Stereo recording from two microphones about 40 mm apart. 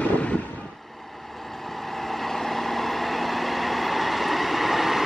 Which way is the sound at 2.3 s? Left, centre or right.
Centre.